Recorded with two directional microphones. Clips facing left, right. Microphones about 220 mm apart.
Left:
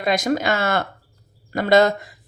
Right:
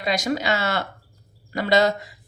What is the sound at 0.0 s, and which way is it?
Speech, 50° left (ahead or behind).